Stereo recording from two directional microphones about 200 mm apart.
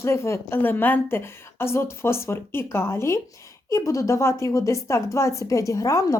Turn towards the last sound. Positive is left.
turn(degrees=15)  # may be behind; listen again after turning